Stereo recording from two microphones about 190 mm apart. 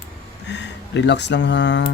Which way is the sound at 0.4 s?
65° left (ahead or behind).